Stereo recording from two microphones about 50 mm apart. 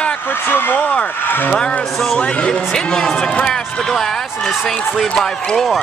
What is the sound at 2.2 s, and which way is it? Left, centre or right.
Speech, left.